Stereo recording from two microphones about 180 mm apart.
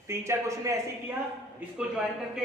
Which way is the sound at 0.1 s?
15° right (ahead or behind).